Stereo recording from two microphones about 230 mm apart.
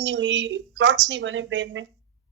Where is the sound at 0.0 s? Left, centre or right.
Right.